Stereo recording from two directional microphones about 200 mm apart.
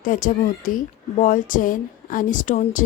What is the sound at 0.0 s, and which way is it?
A woman's voice, 45° left (ahead or behind).